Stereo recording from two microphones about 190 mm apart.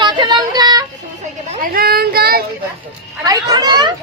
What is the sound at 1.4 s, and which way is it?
Speech, 50° right (ahead or behind).